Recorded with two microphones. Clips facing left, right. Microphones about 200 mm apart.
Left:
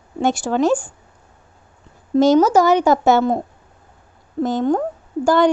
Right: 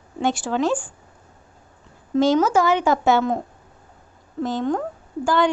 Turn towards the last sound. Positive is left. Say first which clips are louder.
# left 5 dB
turn(degrees=40)  # may be behind; listen again after turning